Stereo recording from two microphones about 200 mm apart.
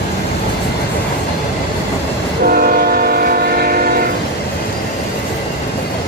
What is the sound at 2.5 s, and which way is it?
Train, 45° right (ahead or behind).